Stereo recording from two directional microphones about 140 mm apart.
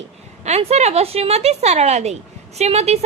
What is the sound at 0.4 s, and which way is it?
A woman's voice, 50° right (ahead or behind).